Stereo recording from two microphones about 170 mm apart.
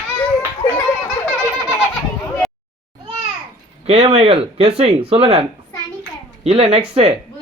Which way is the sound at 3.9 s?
35° right (ahead or behind).